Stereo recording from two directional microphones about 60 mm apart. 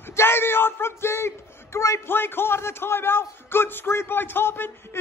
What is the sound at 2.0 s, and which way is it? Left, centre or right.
A man's voice, left.